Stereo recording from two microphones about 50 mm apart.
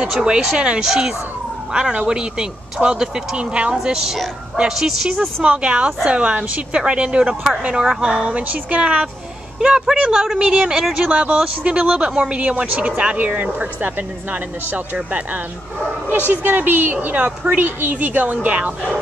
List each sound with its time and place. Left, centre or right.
0.2 s speech: centre
3.7 s speech: centre
5.4 s speech: right
7.8 s speech: centre
8.1 s speech: right
9.6 s speech: centre
11.1 s speech: right
12.6 s speech: right
16.1 s speech: right
17.6 s speech: right